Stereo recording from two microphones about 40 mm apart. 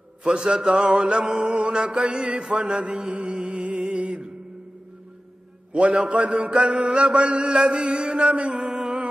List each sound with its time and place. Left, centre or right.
0.2 s mantra: centre
1.6 s a sound: right
3.3 s music: right
5.7 s a sound: right
6.6 s mantra: right
8.5 s music: centre